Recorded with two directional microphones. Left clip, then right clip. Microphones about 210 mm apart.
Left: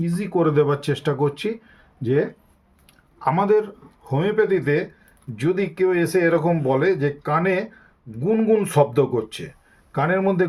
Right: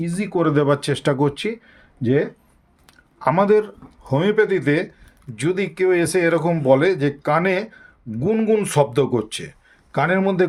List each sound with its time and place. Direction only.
0.0 s speech: 40° right (ahead or behind)